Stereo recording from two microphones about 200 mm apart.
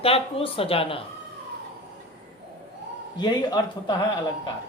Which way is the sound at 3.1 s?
25° left (ahead or behind).